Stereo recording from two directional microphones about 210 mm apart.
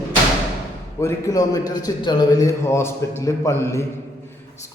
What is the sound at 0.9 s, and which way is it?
A man's voice, 15° left (ahead or behind).